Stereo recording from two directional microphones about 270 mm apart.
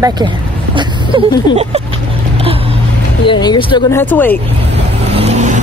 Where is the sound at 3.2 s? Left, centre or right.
Centre.